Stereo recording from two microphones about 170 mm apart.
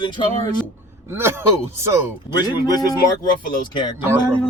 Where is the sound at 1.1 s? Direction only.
15° right (ahead or behind).